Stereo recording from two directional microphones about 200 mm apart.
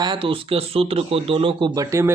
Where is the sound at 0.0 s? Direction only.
25° right (ahead or behind).